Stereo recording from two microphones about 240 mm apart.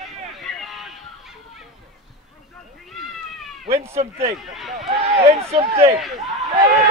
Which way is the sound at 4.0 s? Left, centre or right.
Right.